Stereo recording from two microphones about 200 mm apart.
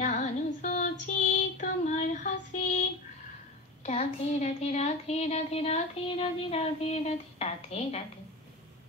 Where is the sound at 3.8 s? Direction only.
35° left (ahead or behind).